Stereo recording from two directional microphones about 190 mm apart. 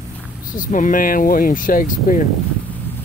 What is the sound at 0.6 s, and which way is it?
Speech, 45° left (ahead or behind).